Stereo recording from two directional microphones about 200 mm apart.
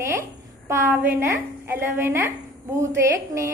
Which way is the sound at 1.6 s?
10° right (ahead or behind).